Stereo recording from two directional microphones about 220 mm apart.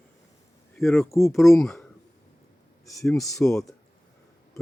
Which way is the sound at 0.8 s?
Centre (ahead or behind).